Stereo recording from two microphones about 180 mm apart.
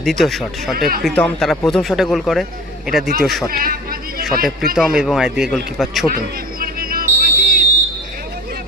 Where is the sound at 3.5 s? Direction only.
55° right (ahead or behind).